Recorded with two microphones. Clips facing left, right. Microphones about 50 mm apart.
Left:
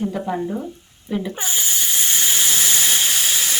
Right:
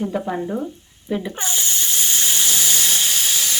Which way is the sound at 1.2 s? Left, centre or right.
Centre.